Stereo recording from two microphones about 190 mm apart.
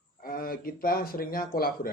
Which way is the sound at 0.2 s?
50° left (ahead or behind).